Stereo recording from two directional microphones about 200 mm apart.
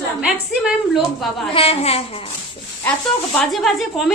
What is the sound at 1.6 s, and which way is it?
Speech, 30° left (ahead or behind).